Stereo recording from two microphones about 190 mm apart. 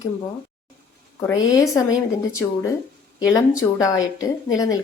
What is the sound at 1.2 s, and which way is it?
Speech, 20° left (ahead or behind).